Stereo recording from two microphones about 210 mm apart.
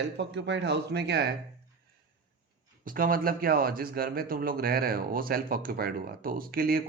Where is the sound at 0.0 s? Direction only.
55° right (ahead or behind).